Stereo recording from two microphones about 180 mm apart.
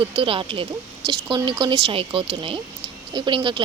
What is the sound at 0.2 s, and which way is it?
A woman's voice, 30° right (ahead or behind).